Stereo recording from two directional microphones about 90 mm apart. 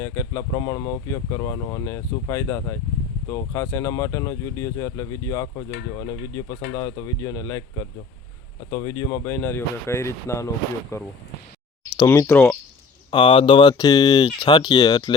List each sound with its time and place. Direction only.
0.0 s speech: 35° left (ahead or behind)
11.9 s a sound: 45° left (ahead or behind)
13.1 s speech: 65° left (ahead or behind); by 14.0 s 45° left (ahead or behind)
14.0 s speech: 55° left (ahead or behind)